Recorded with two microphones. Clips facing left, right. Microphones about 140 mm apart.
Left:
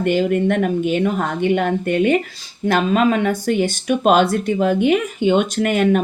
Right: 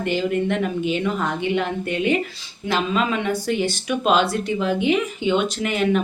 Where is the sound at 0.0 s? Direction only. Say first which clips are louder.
Left 5 dB; 50° left (ahead or behind).